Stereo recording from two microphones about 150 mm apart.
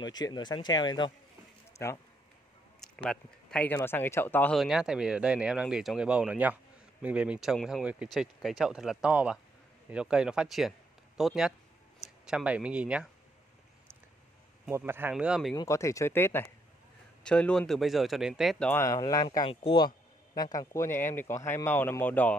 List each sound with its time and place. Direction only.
0.0 s speech: 30° left (ahead or behind)
1.8 s speech: 20° left (ahead or behind)
2.8 s speech: 5° left (ahead or behind)
4.6 s speech: 5° right (ahead or behind)
14.7 s speech: 15° right (ahead or behind)
15.5 s speech: 20° left (ahead or behind); by 18.7 s centre (ahead or behind)
18.7 s speech: 15° left (ahead or behind); by 19.9 s 35° left (ahead or behind)
20.5 s speech: 20° left (ahead or behind)